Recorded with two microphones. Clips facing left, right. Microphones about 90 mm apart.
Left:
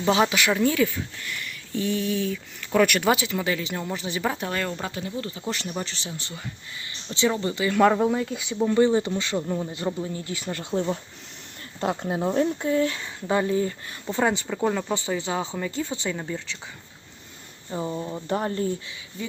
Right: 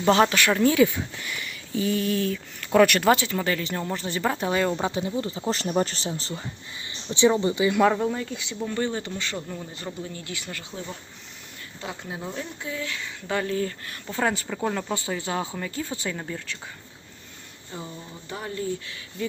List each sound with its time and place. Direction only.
0.0 s speech: 5° left (ahead or behind)
0.5 s speech: centre (ahead or behind)
4.4 s speech: 15° right (ahead or behind); by 6.4 s 35° right (ahead or behind)
6.9 s speech: 20° right (ahead or behind)
7.9 s speech: 10° left (ahead or behind)
10.6 s speech: 55° left (ahead or behind); by 13.1 s 35° left (ahead or behind)
13.2 s speech: 20° left (ahead or behind)
17.7 s speech: 30° left (ahead or behind)
17.9 s speech: 50° left (ahead or behind)